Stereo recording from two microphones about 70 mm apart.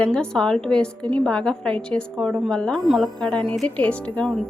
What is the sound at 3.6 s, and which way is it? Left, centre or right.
Speech, centre.